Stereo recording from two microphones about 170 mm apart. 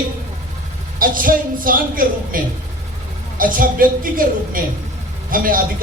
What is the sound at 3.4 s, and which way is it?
A woman's voice, 55° right (ahead or behind).